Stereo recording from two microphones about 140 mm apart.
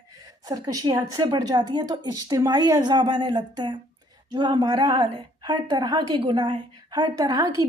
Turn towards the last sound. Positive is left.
turn(degrees=-25)  # may be behind; listen again after turning